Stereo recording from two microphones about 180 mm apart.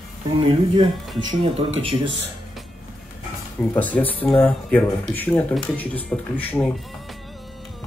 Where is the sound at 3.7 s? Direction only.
10° left (ahead or behind).